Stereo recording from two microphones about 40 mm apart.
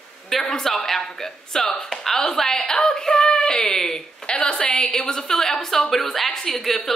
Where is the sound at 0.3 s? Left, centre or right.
Centre.